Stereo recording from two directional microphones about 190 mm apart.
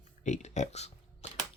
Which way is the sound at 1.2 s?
35° left (ahead or behind).